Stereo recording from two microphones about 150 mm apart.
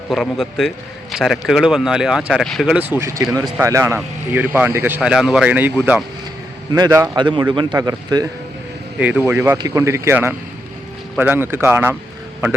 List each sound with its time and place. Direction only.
0.1 s speech: 5° left (ahead or behind); by 6.0 s 15° right (ahead or behind)
6.7 s a man's voice: 25° right (ahead or behind)
7.2 s a man's voice: 30° right (ahead or behind)
9.0 s speech: 10° right (ahead or behind)